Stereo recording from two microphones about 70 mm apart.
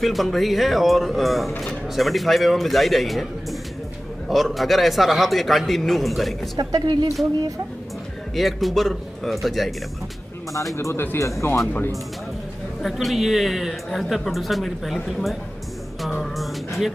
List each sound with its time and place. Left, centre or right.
0.0 s speech: centre
4.3 s speech: centre
6.5 s speech: right
8.4 s speech: centre
10.8 s speech: left
12.8 s speech: centre